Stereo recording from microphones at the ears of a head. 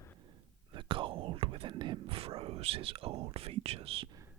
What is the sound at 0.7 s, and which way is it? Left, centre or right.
Whispering, right.